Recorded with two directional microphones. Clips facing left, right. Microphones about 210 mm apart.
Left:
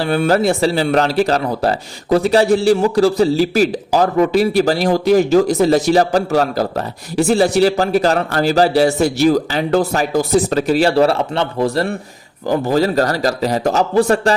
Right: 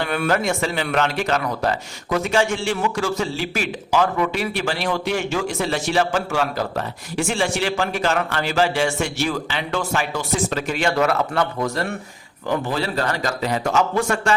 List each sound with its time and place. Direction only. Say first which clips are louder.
0.0 s speech: left 6 dB; 35° left (ahead or behind)